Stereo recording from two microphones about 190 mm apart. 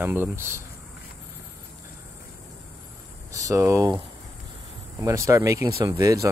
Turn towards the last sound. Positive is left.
turn(degrees=-15)  # may be behind; listen again after turning